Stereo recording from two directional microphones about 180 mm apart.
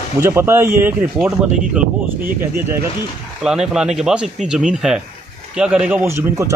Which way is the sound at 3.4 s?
5° right (ahead or behind).